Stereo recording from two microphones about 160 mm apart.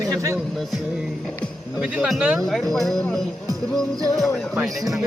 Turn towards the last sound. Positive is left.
turn(degrees=0)  # may be behind; listen again after turning